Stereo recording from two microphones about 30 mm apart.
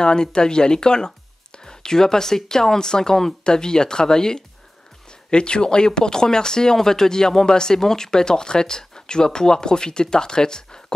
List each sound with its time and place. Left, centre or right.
0.0 s speech: left